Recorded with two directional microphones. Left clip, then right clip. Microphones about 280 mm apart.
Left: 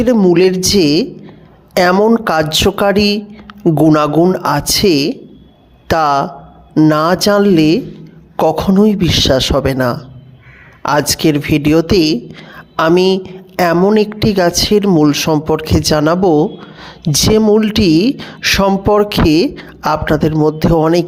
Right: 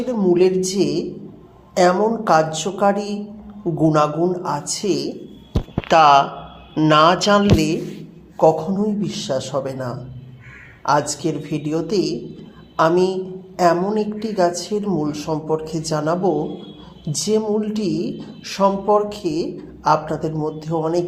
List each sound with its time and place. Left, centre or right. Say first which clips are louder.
0.0 s a woman's voice: left 7 dB; left